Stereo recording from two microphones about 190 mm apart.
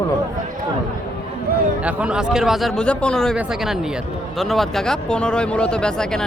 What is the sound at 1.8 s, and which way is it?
Speech, 5° right (ahead or behind).